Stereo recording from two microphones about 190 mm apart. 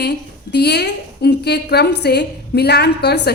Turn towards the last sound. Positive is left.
turn(degrees=60)  # may be behind; listen again after turning